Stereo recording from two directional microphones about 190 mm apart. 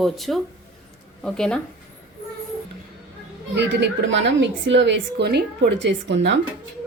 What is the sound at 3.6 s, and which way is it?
A woman's voice, 70° right (ahead or behind).